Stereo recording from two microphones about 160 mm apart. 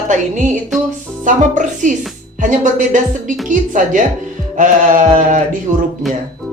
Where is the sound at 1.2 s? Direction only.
50° right (ahead or behind).